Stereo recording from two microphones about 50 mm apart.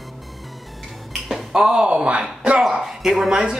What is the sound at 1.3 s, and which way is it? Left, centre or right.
Speech, centre.